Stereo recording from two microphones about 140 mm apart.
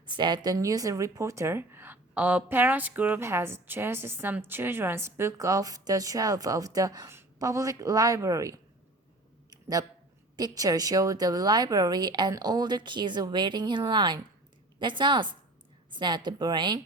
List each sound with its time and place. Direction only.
0.0 s speech: 30° right (ahead or behind)
9.5 s a sound: 25° right (ahead or behind)
10.3 s a woman's voice: 25° right (ahead or behind)